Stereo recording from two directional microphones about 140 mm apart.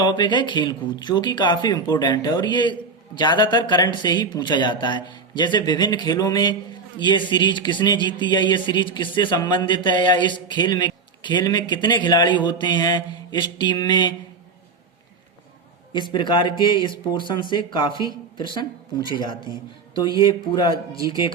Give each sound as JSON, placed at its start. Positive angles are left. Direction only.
{"t": 0.0, "sound": "speech", "side_deg": 35}
{"t": 15.9, "sound": "speech", "side_deg": 35}